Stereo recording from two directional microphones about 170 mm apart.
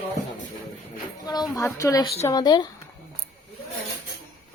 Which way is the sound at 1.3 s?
20° left (ahead or behind).